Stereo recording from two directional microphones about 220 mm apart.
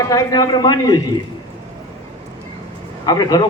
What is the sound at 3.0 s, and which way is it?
Speech, 15° left (ahead or behind).